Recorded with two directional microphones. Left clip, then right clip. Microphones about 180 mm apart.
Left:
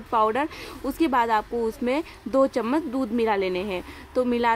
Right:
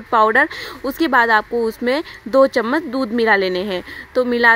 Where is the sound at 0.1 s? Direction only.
15° right (ahead or behind).